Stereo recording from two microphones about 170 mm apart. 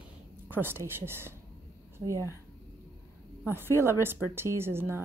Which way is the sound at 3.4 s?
10° right (ahead or behind).